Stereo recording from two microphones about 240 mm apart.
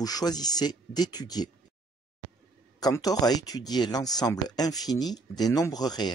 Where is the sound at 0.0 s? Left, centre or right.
Centre.